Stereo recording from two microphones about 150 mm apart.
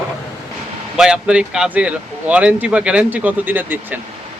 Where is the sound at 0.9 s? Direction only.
5° right (ahead or behind).